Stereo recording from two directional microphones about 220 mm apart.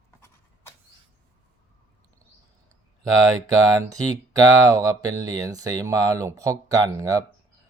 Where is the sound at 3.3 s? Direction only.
15° right (ahead or behind).